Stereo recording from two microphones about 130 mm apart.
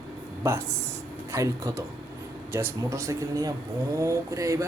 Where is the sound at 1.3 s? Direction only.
25° right (ahead or behind).